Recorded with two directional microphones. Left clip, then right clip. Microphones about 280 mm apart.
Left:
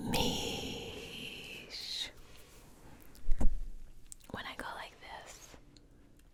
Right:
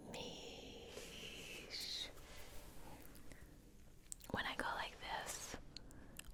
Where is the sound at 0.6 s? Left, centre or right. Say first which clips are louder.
Left 13 dB; left.